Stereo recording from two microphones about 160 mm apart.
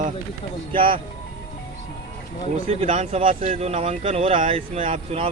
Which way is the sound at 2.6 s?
40° right (ahead or behind).